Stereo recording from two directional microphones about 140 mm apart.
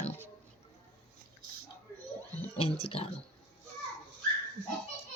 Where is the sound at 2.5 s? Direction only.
45° left (ahead or behind).